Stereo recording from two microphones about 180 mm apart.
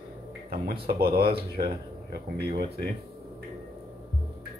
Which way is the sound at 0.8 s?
60° right (ahead or behind).